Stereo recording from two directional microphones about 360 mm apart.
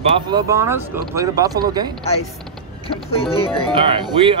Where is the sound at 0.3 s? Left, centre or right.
Centre.